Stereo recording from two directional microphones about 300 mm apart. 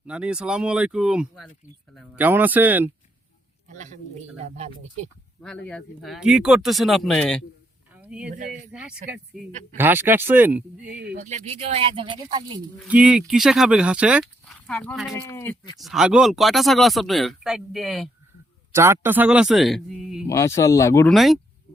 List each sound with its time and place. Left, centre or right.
0.1 s speech: centre
3.7 s speech: right
5.4 s speech: centre
8.3 s speech: right
8.7 s speech: centre
11.1 s speech: right
12.9 s speech: centre
20.2 s speech: centre